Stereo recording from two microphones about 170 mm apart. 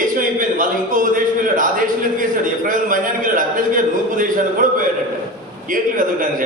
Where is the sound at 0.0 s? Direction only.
50° right (ahead or behind).